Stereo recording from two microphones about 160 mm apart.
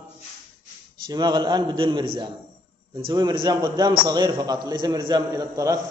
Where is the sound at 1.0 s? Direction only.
25° right (ahead or behind).